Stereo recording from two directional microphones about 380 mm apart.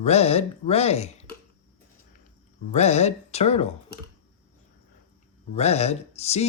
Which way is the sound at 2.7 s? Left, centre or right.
Centre.